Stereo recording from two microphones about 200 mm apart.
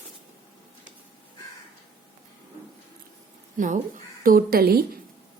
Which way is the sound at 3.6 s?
40° right (ahead or behind).